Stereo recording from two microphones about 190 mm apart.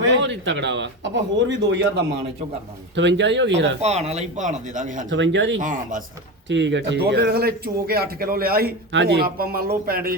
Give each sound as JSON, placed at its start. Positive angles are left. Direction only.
{"t": 0.0, "sound": "speech", "side_deg": -75}
{"t": 2.9, "sound": "speech", "side_deg": -70}
{"t": 3.8, "sound": "speech", "side_deg": -35}
{"t": 5.0, "sound": "speech", "side_deg": -75}
{"t": 5.5, "sound": "speech", "side_deg": -45}
{"t": 6.5, "sound": "a man's voice", "side_deg": -70}
{"t": 8.9, "sound": "speech", "side_deg": -65}